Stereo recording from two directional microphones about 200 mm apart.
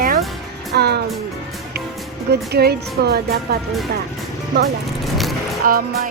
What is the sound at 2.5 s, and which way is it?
Speech, 55° right (ahead or behind).